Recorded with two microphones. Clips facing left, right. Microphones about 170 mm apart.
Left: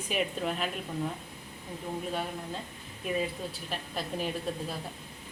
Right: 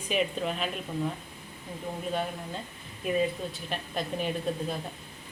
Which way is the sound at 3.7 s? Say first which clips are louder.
Right 3 dB; 5° left (ahead or behind).